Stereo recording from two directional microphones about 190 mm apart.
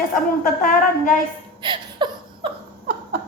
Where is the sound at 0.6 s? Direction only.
45° left (ahead or behind).